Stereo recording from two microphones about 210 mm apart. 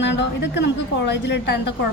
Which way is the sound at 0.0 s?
55° left (ahead or behind).